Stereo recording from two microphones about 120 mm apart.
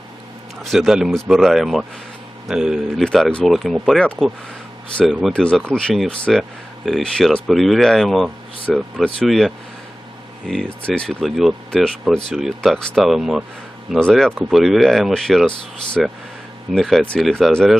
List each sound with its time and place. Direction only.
0.6 s speech: centre (ahead or behind)
10.8 s speech: 5° left (ahead or behind)